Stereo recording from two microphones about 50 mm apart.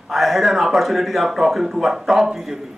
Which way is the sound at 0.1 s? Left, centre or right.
Centre.